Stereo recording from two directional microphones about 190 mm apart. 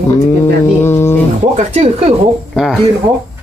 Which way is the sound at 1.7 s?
35° right (ahead or behind).